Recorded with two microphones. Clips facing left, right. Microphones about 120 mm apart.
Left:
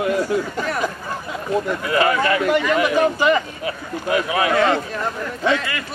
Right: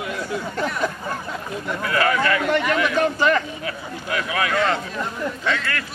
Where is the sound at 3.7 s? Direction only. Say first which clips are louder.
Left 6 dB; 25° left (ahead or behind).